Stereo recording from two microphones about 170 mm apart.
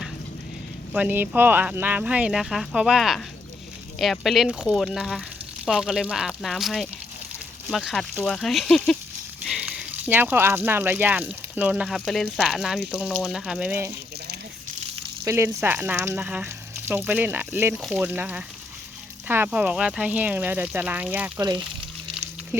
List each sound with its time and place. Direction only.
0.9 s speech: 10° right (ahead or behind)
15.2 s speech: 15° right (ahead or behind)